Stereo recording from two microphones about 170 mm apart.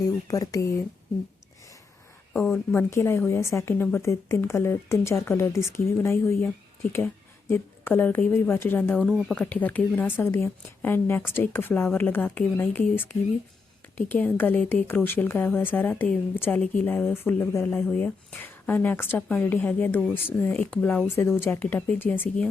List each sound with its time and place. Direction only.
0.0 s speech: 20° left (ahead or behind)
2.3 s speech: centre (ahead or behind)
2.7 s a woman's voice: 15° left (ahead or behind)
14.1 s speech: 10° left (ahead or behind)